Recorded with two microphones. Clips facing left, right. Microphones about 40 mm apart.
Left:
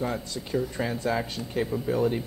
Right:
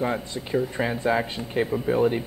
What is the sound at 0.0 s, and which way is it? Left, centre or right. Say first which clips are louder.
A man's voice: right 4 dB; right.